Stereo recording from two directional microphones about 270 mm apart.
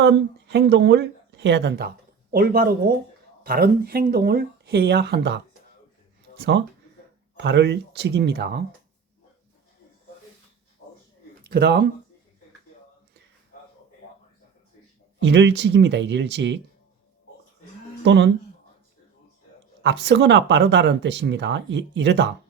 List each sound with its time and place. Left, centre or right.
0.0 s speech: right
7.3 s speech: right
11.4 s speech: right
15.2 s speech: right
18.0 s speech: right
19.8 s speech: right